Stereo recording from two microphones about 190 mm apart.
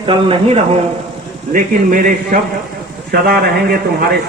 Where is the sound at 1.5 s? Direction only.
45° right (ahead or behind).